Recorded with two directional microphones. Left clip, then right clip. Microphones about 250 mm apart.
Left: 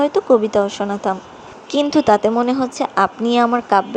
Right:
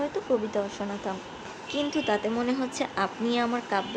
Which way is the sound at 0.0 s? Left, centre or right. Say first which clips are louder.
Left 13 dB; left.